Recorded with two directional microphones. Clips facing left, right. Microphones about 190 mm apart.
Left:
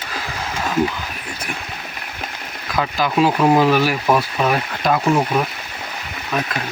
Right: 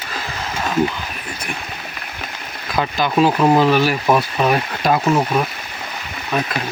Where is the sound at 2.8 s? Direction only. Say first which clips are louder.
Right 1 dB; 5° left (ahead or behind).